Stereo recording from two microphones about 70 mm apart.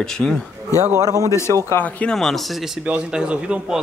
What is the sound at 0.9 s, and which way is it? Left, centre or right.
Speech, right.